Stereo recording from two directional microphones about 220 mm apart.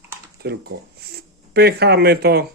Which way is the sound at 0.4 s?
50° right (ahead or behind).